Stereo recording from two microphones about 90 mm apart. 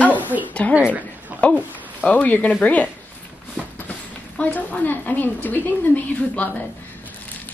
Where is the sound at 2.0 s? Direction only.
20° left (ahead or behind).